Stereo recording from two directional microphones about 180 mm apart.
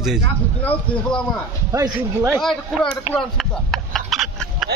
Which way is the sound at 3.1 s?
Centre (ahead or behind).